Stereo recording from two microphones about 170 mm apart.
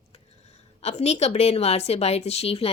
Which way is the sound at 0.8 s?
40° left (ahead or behind).